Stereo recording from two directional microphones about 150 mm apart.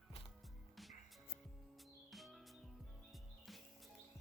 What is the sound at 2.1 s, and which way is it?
Music, centre (ahead or behind).